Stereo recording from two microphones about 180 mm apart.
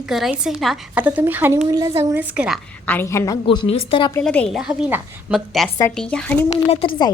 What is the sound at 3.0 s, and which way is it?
Speech, 15° left (ahead or behind).